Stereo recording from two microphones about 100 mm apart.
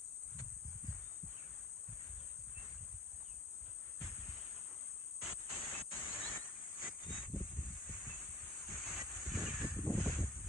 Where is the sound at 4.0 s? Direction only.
Centre (ahead or behind).